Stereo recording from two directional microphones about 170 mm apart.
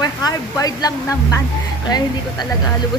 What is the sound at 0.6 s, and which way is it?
Speech, 20° left (ahead or behind).